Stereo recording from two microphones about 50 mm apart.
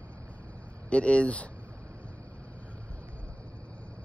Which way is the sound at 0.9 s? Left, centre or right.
Left.